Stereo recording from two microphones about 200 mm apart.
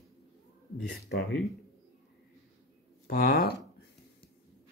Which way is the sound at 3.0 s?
50° left (ahead or behind).